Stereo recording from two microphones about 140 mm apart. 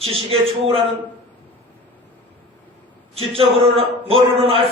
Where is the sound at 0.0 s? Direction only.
45° right (ahead or behind).